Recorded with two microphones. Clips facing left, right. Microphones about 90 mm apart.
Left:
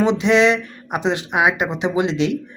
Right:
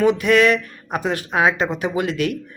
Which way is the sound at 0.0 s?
20° left (ahead or behind).